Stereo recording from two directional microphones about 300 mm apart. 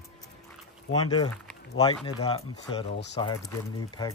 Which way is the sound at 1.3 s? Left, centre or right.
Centre.